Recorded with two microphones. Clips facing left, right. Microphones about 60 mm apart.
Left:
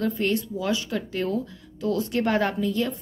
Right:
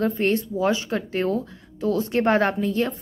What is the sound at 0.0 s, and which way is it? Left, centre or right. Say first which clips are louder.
A woman's voice: right 3 dB; right.